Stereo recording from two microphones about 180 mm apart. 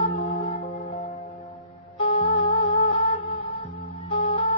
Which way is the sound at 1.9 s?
30° left (ahead or behind).